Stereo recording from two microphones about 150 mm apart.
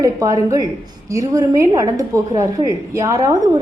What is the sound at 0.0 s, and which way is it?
A woman's voice, 20° right (ahead or behind).